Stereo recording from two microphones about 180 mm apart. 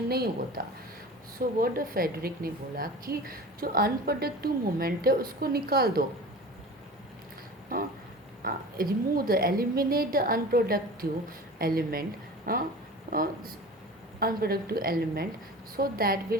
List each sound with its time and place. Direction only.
0.1 s a woman's voice: 60° right (ahead or behind)
7.7 s a woman's voice: 50° right (ahead or behind)